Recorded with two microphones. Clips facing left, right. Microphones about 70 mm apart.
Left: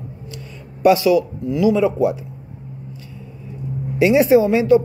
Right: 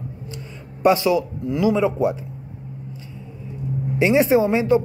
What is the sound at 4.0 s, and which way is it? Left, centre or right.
Speech, right.